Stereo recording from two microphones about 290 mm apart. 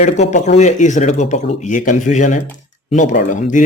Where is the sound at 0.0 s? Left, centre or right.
Left.